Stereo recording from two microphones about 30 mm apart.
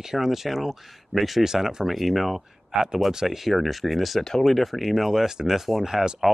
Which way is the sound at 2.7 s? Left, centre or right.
Centre.